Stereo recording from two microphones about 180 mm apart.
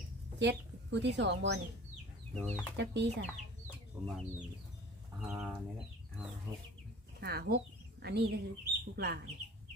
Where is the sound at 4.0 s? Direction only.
5° right (ahead or behind).